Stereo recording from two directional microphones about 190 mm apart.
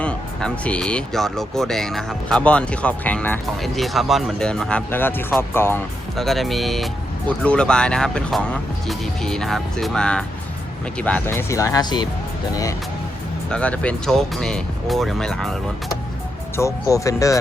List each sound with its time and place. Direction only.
0.0 s speech: 5° left (ahead or behind)
6.1 s speech: centre (ahead or behind); by 12.0 s 20° left (ahead or behind)
13.5 s speech: 5° left (ahead or behind)
16.6 s speech: 15° left (ahead or behind)